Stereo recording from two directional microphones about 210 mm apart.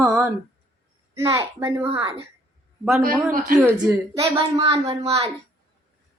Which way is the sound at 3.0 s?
45° right (ahead or behind).